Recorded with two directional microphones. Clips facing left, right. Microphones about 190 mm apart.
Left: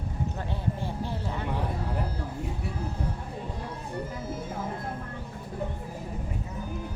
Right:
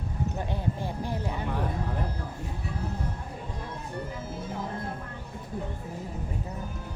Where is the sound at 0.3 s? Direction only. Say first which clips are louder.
Right 1 dB; 15° right (ahead or behind).